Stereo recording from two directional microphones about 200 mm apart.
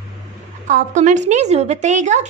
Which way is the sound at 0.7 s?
40° right (ahead or behind).